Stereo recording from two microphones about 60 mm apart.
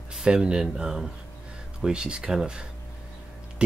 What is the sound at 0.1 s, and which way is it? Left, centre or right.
Speech, centre.